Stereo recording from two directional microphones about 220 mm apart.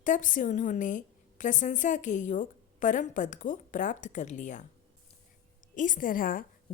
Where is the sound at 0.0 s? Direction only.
35° left (ahead or behind).